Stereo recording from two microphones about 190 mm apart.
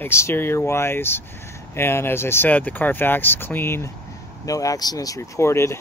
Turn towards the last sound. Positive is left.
turn(degrees=15)  # may be behind; listen again after turning